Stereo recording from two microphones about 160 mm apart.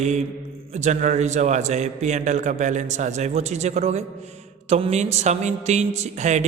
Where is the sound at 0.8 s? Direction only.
50° right (ahead or behind).